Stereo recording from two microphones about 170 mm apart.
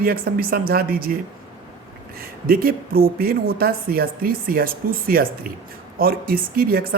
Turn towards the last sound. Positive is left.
turn(degrees=-60)  # may be behind; listen again after turning